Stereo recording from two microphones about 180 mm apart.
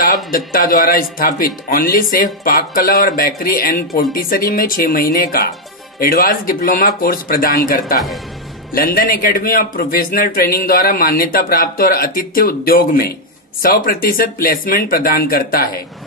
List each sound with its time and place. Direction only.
0.5 s a man's voice: 55° left (ahead or behind)